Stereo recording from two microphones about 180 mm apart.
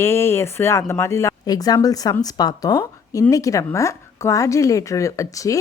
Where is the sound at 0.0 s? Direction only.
15° left (ahead or behind).